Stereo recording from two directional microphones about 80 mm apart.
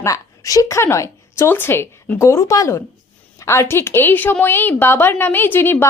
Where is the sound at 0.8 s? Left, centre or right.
Left.